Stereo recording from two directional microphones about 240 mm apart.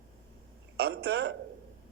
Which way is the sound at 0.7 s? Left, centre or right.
Right.